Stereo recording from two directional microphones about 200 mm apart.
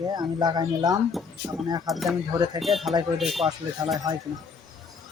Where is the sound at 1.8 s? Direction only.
Centre (ahead or behind).